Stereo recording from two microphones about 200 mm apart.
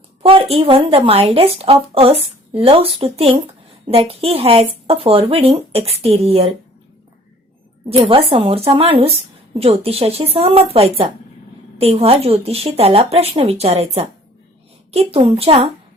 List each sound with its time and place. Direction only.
0.2 s speech: 30° right (ahead or behind)
7.9 s speech: 30° right (ahead or behind)